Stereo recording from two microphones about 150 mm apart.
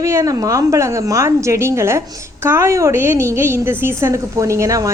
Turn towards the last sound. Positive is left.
turn(degrees=-20)  # may be behind; listen again after turning